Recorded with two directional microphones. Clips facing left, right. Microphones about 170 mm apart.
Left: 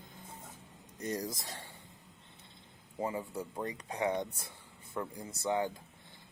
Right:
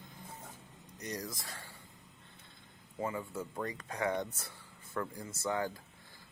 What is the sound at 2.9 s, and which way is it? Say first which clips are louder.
Speech: left 1 dB; 25° left (ahead or behind).